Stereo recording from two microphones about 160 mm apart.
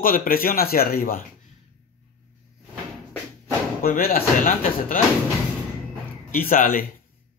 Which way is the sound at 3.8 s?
70° left (ahead or behind).